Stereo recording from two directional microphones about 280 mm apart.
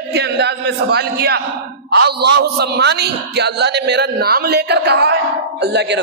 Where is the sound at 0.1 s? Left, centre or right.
Right.